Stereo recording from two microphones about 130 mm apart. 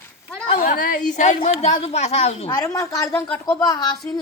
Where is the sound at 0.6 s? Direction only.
90° left; by 1.3 s 75° left (ahead or behind).